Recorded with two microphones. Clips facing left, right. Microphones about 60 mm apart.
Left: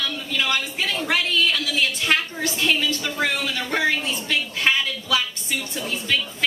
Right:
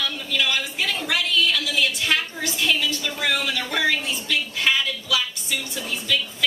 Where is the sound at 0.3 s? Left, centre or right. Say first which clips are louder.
Even; left.